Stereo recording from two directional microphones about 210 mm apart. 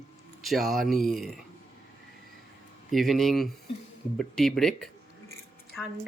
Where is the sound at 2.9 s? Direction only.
Centre (ahead or behind).